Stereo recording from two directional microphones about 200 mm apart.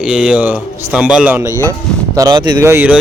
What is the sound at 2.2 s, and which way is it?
Speech, 20° right (ahead or behind).